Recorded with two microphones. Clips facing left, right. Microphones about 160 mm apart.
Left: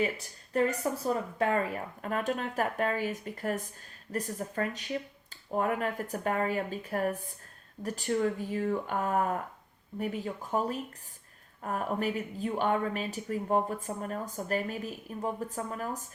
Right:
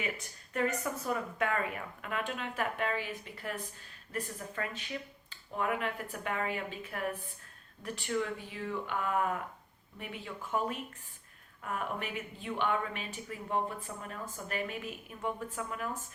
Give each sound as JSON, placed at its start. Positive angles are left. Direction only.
{"t": 0.0, "sound": "speech", "side_deg": 35}